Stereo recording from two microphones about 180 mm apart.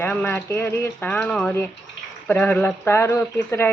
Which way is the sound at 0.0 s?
10° left (ahead or behind).